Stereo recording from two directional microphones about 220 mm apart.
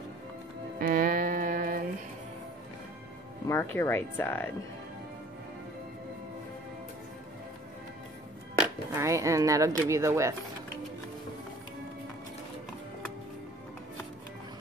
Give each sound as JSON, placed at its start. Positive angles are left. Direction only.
{"t": 0.7, "sound": "music", "side_deg": -40}
{"t": 3.7, "sound": "speech", "side_deg": 10}
{"t": 8.5, "sound": "speech", "side_deg": -10}